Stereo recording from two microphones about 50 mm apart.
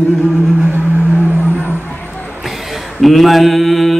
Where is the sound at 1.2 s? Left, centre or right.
Right.